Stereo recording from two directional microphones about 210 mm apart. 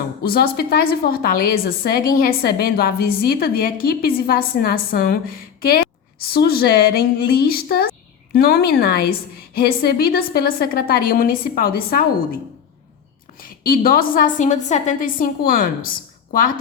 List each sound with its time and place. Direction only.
0.3 s a woman's voice: 45° left (ahead or behind)
13.4 s a woman's voice: 45° left (ahead or behind)